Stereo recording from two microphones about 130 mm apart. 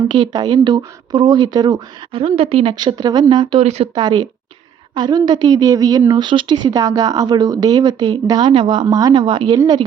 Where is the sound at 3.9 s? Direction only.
35° right (ahead or behind).